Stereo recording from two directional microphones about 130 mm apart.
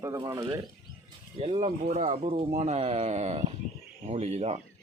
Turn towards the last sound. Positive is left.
turn(degrees=-55)  # may be behind; listen again after turning